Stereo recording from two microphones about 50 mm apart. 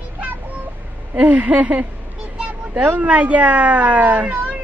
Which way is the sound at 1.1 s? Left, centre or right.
Right.